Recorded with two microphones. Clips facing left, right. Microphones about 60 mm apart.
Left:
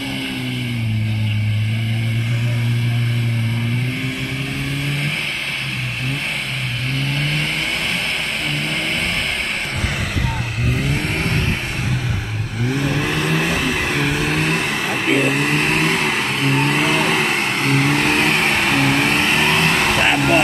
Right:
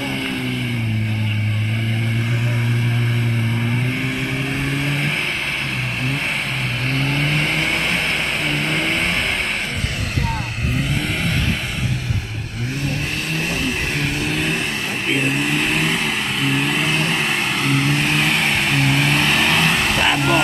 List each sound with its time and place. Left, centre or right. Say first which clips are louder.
7.2 s vehicle: right 2 dB; centre
13.7 s vehicle: left 3 dB; left
14.3 s vehicle: left 2 dB; left
15.0 s vehicle: left 3 dB; left
15.4 s vehicle: left 2 dB; left
17.4 s vehicle: left 2 dB; left
19.1 s vehicle: even; centre